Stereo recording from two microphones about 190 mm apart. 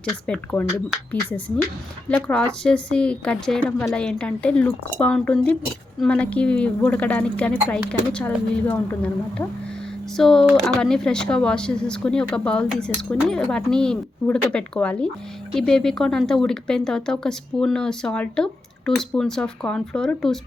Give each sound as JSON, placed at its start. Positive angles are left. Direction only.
{"t": 0.3, "sound": "a woman's voice", "side_deg": 5}